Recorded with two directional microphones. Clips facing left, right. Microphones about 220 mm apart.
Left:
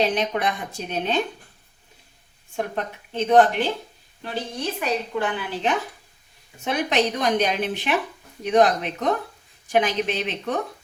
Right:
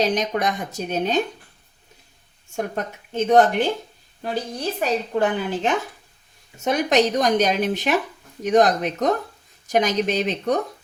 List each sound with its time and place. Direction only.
0.0 s speech: 40° right (ahead or behind)
2.6 s speech: 45° right (ahead or behind)
4.8 s speech: 45° right (ahead or behind)